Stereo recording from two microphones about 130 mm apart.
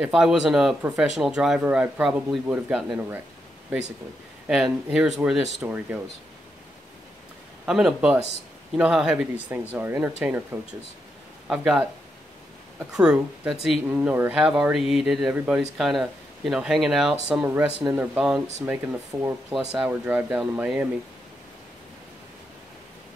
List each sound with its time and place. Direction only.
0.0 s speech: 5° right (ahead or behind)
4.5 s speech: 5° right (ahead or behind)
7.6 s speech: 5° right (ahead or behind)
11.4 s speech: 5° right (ahead or behind)
12.9 s speech: 5° right (ahead or behind)
13.8 s speech: 15° right (ahead or behind)